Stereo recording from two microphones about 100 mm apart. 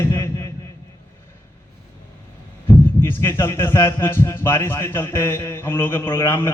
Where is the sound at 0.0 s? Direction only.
30° left (ahead or behind).